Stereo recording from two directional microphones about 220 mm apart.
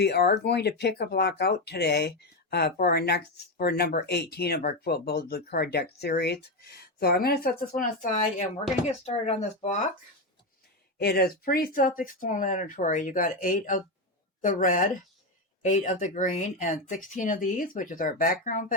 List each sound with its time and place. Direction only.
0.0 s speech: 50° left (ahead or behind); by 9.7 s 30° left (ahead or behind)
10.9 s speech: 45° left (ahead or behind)